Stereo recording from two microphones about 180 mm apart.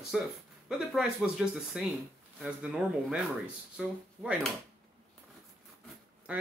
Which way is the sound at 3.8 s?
5° right (ahead or behind).